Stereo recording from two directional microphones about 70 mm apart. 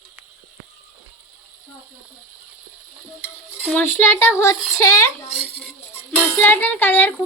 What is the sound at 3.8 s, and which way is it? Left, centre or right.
A child's voice, left.